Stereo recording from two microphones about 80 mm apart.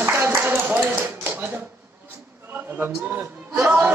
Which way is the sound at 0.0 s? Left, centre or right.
Right.